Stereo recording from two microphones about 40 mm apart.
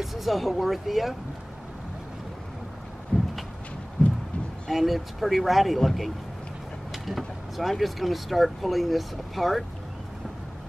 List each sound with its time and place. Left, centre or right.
0.0 s speech: centre
3.1 s a sound: left
4.6 s speech: centre